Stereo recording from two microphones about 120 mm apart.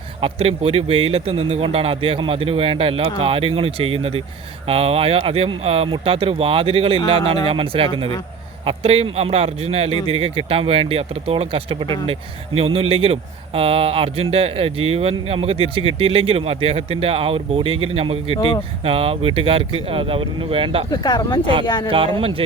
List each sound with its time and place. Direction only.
0.2 s a man's voice: 50° right (ahead or behind)
18.3 s speech: 40° left (ahead or behind)
18.8 s a man's voice: 50° right (ahead or behind)
20.9 s speech: 35° left (ahead or behind)
21.8 s a man's voice: 50° right (ahead or behind)